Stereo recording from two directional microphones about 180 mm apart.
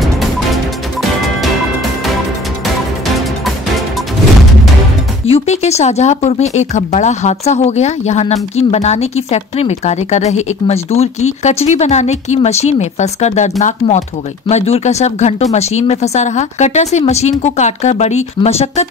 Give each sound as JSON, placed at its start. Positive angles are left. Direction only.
{"t": 5.3, "sound": "speech", "side_deg": 35}